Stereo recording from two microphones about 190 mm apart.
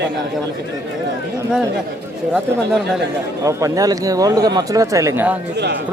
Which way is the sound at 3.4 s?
15° right (ahead or behind).